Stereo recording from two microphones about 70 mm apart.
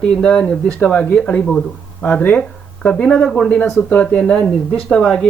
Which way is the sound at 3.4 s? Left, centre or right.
Left.